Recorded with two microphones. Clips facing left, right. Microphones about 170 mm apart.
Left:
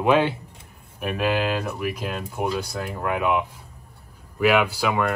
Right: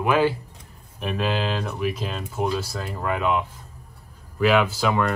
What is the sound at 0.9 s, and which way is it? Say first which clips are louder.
Speech: left 2 dB; 10° left (ahead or behind).